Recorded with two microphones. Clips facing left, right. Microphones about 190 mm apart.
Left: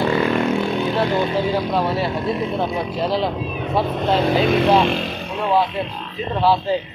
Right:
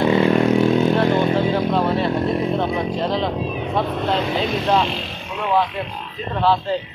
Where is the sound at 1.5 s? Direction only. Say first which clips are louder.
Right 1 dB; 5° left (ahead or behind).